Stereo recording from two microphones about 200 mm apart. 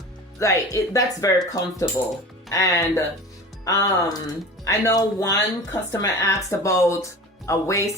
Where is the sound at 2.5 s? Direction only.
15° left (ahead or behind).